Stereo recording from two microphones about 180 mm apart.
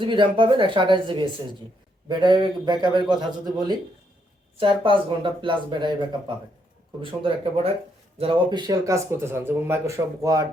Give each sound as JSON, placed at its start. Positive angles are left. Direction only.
{"t": 0.0, "sound": "speech", "side_deg": -25}